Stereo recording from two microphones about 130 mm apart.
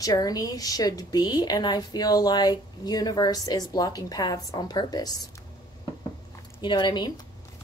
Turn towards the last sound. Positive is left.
turn(degrees=35)  # may be behind; listen again after turning